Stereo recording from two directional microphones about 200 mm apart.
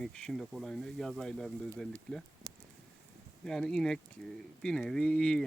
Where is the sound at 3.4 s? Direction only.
5° left (ahead or behind).